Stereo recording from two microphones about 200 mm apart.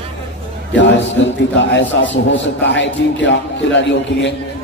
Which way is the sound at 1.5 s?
65° left (ahead or behind).